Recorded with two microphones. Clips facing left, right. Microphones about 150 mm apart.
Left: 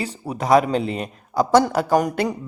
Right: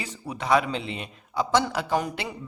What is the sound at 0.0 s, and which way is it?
A man's voice, 40° left (ahead or behind).